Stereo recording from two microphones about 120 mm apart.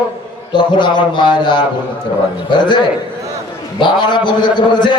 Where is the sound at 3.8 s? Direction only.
40° left (ahead or behind).